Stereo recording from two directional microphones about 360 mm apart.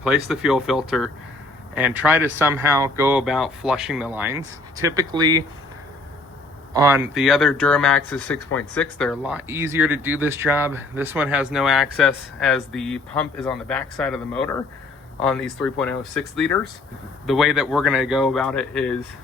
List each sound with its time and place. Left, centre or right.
0.0 s speech: centre
6.7 s speech: centre